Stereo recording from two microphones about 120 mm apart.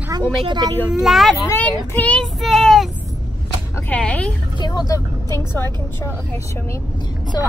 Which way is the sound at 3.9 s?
10° left (ahead or behind).